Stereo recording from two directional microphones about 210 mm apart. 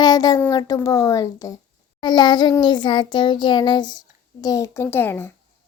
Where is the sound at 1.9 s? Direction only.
20° left (ahead or behind).